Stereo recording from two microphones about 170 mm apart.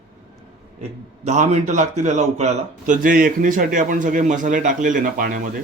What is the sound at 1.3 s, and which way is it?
A man's voice, 40° right (ahead or behind).